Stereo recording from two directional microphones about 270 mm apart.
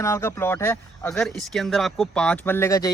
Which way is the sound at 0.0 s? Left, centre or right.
Centre.